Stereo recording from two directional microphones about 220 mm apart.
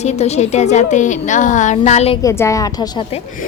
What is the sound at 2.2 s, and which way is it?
Speech, 15° left (ahead or behind).